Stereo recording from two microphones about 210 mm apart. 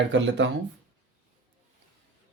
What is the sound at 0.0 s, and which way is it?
Speech, 60° right (ahead or behind).